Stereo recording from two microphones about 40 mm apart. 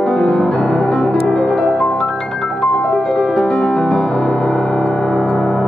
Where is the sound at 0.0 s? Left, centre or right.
Centre.